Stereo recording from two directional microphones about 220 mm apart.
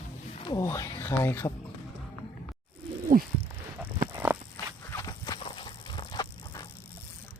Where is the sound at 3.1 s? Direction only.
40° right (ahead or behind).